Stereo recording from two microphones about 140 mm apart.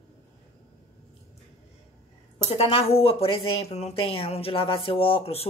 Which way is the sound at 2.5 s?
45° left (ahead or behind).